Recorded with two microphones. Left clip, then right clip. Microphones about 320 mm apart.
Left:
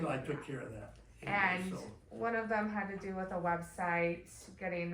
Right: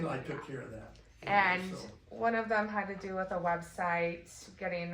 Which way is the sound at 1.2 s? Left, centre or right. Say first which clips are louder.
Right 5 dB; right.